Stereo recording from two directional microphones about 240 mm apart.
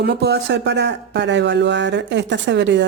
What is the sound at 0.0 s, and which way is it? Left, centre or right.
Speech, right.